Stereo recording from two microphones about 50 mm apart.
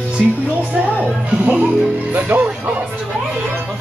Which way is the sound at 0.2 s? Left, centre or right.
Centre.